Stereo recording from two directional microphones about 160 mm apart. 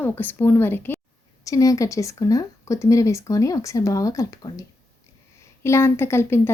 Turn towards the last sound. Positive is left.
turn(degrees=15)  # may be behind; listen again after turning